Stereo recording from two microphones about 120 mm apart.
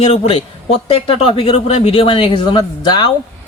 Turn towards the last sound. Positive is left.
turn(degrees=40)  # may be behind; listen again after turning